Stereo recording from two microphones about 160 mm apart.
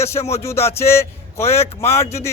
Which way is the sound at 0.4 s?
15° left (ahead or behind).